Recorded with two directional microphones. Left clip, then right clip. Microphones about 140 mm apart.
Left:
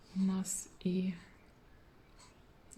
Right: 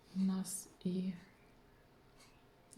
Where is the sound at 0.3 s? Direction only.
15° left (ahead or behind).